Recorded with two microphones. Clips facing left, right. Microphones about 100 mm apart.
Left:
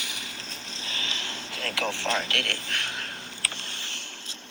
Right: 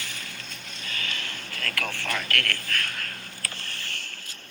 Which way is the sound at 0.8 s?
25° left (ahead or behind).